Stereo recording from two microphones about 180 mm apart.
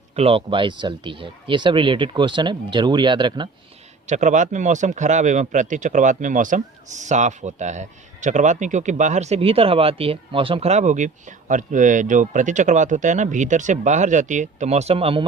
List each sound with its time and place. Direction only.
0.2 s speech: 30° right (ahead or behind)
4.0 s speech: 40° right (ahead or behind)